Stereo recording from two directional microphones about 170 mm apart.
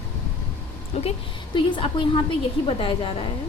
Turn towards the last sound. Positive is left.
turn(degrees=30)  # may be behind; listen again after turning